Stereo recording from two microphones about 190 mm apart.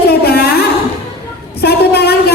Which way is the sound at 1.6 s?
55° left (ahead or behind).